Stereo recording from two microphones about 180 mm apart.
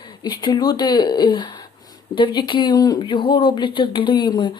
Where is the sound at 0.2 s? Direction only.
25° left (ahead or behind).